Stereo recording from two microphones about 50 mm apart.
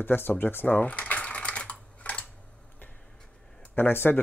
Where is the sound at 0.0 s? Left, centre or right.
Left.